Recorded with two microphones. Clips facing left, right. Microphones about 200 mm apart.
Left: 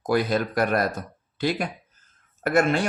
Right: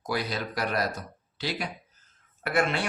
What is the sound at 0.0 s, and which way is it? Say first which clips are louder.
Speech: left 8 dB; 50° left (ahead or behind).